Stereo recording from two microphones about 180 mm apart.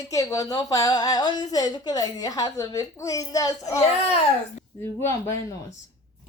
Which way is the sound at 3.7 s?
35° left (ahead or behind).